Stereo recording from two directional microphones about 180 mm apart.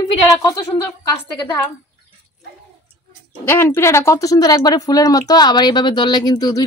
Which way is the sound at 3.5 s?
10° left (ahead or behind).